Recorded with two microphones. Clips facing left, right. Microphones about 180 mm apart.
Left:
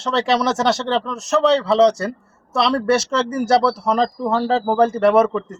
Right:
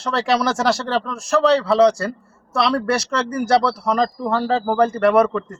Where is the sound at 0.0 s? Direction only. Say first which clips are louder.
Left 1 dB; centre (ahead or behind).